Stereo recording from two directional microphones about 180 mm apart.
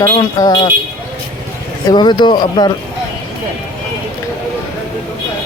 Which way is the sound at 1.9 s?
25° left (ahead or behind).